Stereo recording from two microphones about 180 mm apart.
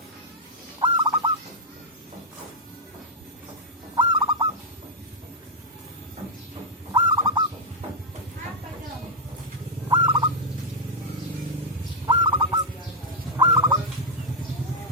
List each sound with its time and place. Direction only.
0.8 s bird: 25° right (ahead or behind)
3.9 s owl: 25° right (ahead or behind)
6.9 s bird: 25° right (ahead or behind)
9.9 s turkey: 25° right (ahead or behind)
12.0 s bird: 25° right (ahead or behind)
13.3 s fowl: 25° right (ahead or behind)